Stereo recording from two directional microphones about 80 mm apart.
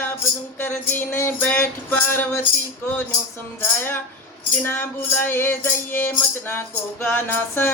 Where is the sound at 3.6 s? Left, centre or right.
Left.